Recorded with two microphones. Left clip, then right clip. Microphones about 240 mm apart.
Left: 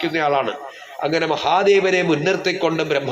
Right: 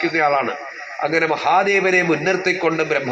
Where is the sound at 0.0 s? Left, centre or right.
Left.